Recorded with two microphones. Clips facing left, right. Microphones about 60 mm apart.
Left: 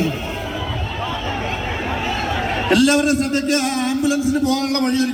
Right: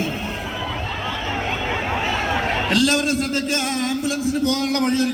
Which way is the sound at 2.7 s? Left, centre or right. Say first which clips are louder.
Left 6 dB; centre.